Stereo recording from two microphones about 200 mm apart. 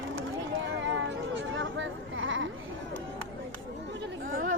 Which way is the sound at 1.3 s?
70° right (ahead or behind).